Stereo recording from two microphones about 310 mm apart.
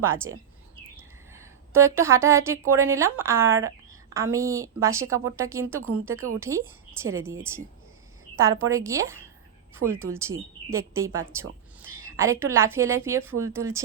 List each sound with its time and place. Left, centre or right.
0.0 s a woman's voice: centre
11.9 s a sound: right
12.1 s a woman's voice: centre